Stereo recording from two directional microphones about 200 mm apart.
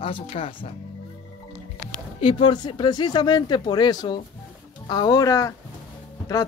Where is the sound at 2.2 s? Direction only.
25° left (ahead or behind).